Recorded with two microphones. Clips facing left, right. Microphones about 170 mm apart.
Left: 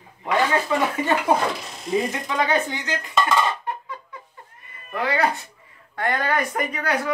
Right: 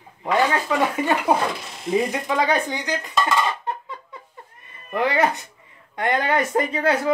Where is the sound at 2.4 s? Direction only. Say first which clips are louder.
Right 1 dB; 15° right (ahead or behind).